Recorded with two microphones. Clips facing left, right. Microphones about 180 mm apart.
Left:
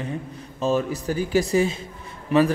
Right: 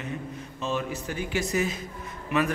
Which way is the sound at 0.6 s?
40° left (ahead or behind).